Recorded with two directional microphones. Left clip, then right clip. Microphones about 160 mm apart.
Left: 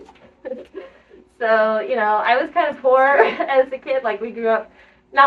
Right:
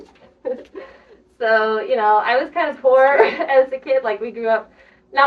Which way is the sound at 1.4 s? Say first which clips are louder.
Even; 15° left (ahead or behind).